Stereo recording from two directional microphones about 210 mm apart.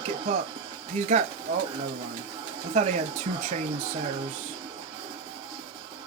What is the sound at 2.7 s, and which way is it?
Speech, 30° right (ahead or behind).